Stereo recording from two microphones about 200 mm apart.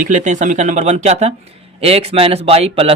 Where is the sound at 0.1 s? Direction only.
40° right (ahead or behind).